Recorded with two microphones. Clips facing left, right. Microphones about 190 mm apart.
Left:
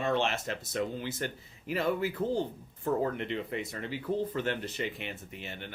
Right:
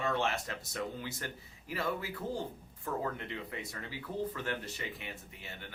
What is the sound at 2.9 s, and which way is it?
Speech, 30° left (ahead or behind).